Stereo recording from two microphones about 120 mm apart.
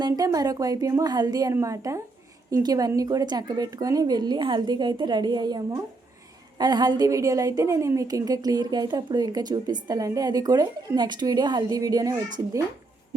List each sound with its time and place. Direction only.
0.0 s a woman's voice: 30° right (ahead or behind)